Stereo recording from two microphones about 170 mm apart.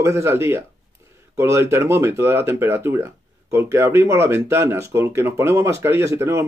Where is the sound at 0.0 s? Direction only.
15° right (ahead or behind).